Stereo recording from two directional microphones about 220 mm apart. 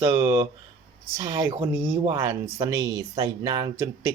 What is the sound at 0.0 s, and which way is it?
Speech, 15° right (ahead or behind).